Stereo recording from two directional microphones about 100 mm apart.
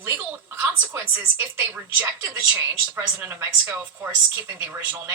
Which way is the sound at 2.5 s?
15° right (ahead or behind).